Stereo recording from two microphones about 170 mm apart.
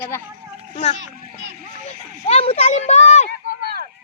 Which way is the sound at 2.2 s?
35° left (ahead or behind).